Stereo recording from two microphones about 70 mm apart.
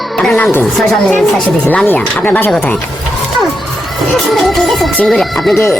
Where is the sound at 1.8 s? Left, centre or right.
Left.